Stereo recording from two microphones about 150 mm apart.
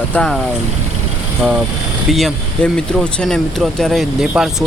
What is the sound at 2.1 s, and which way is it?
Speech, centre (ahead or behind).